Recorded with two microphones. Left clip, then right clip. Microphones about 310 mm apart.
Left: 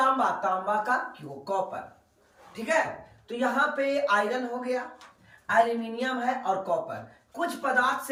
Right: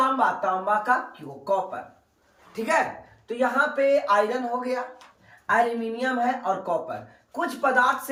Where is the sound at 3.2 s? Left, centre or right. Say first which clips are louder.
Right 3 dB; centre.